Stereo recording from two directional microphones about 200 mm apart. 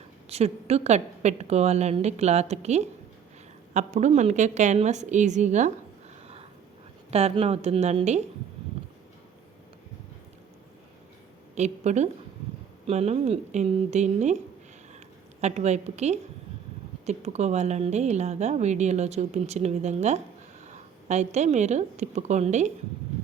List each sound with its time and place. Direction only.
0.3 s a woman's voice: 30° right (ahead or behind)
7.1 s a woman's voice: 30° right (ahead or behind)
11.5 s a woman's voice: 35° right (ahead or behind)
15.4 s a woman's voice: 35° right (ahead or behind)